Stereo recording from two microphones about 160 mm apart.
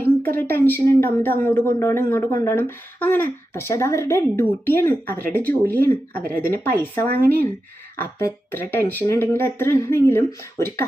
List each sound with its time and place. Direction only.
0.3 s speech: 10° left (ahead or behind)
5.0 s speech: 65° right (ahead or behind)
5.4 s speech: 10° left (ahead or behind)
6.2 s speech: 65° right (ahead or behind)
7.9 s speech: 15° left (ahead or behind)